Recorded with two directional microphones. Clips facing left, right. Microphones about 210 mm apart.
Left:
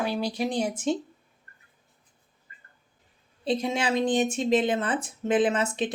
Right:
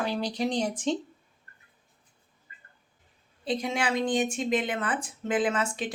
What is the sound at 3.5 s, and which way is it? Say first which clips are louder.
A woman's voice: left 2 dB; 25° left (ahead or behind).